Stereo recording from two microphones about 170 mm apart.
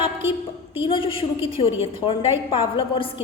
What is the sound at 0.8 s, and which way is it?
A woman's voice, 30° left (ahead or behind).